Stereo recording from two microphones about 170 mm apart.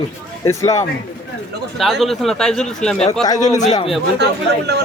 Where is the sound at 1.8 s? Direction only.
Centre (ahead or behind).